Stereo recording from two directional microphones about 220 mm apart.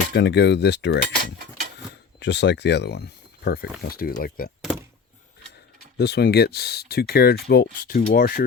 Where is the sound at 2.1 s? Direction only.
50° left (ahead or behind).